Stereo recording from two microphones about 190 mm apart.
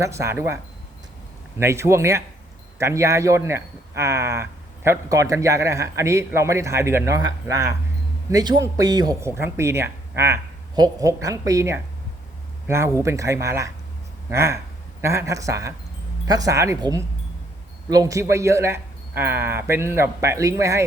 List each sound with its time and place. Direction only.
0.0 s a man's voice: 15° right (ahead or behind)